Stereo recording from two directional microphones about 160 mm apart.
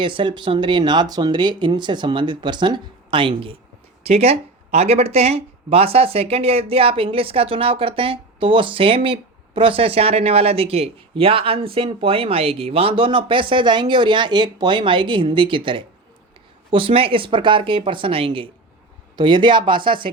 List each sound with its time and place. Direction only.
0.0 s speech: 30° right (ahead or behind)